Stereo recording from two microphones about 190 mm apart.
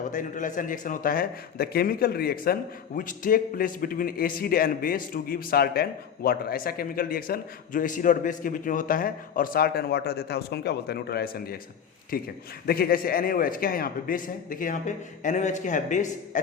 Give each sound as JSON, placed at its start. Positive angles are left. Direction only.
{"t": 0.1, "sound": "a man's voice", "side_deg": 45}